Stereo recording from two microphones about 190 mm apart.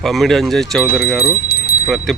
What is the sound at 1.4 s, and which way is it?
Bell, 55° left (ahead or behind).